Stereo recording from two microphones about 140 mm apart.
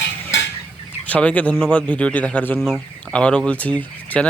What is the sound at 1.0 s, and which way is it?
Speech, 10° left (ahead or behind).